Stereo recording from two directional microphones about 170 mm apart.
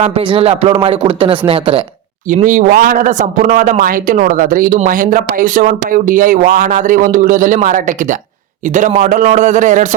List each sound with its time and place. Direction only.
0.0 s speech: 35° right (ahead or behind)
2.3 s a man's voice: 50° right (ahead or behind)
9.0 s a man's voice: 50° right (ahead or behind)